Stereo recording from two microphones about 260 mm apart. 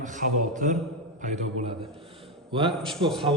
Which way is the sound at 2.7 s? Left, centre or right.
Centre.